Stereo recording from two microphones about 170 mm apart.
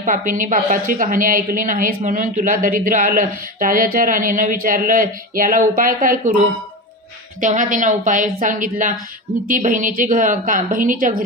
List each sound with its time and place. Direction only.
0.0 s a woman's voice: 50° right (ahead or behind)
7.3 s a woman's voice: 50° right (ahead or behind)